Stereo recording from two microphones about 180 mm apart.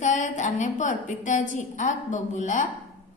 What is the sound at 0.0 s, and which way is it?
A woman's voice, 45° left (ahead or behind).